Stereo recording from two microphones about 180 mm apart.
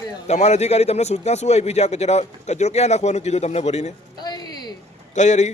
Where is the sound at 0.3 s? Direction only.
40° left (ahead or behind).